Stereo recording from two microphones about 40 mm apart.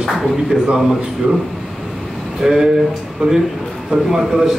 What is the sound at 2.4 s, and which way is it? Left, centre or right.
A man's voice, centre.